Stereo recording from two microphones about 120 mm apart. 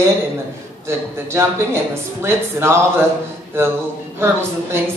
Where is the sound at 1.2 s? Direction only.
20° right (ahead or behind).